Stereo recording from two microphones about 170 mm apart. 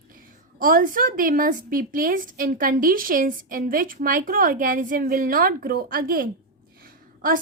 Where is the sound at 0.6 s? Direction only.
55° right (ahead or behind).